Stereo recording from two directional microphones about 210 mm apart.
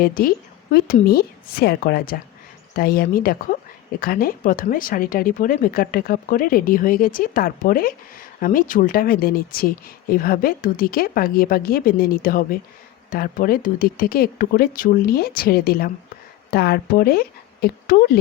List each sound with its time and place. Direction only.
0.0 s a woman's voice: 45° left (ahead or behind)